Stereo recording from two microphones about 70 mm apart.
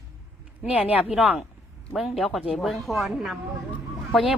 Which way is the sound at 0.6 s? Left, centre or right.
Centre.